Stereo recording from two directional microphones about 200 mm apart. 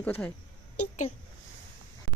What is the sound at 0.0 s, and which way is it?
Speech, 10° left (ahead or behind).